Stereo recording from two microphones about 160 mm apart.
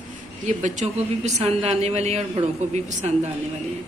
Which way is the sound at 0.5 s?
50° right (ahead or behind).